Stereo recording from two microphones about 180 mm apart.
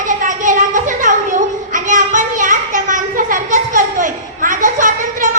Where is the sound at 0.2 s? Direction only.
45° right (ahead or behind).